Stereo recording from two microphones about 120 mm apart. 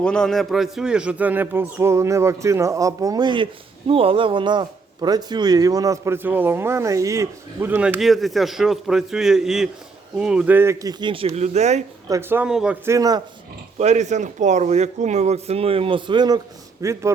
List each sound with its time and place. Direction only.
0.0 s speech: 5° left (ahead or behind); by 10.9 s 25° right (ahead or behind)
11.0 s speech: 50° right (ahead or behind)
11.3 s speech: 70° right (ahead or behind)
12.3 s speech: 15° right (ahead or behind)
12.8 s speech: 25° right (ahead or behind)
13.7 s speech: 70° right (ahead or behind); by 16.4 s 35° right (ahead or behind)
16.8 s speech: 25° right (ahead or behind)